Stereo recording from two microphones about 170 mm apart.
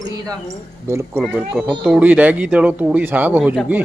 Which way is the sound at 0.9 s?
15° right (ahead or behind).